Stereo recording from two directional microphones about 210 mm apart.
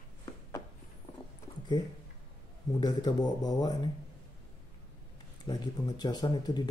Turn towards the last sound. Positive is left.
turn(degrees=20)  # may be behind; listen again after turning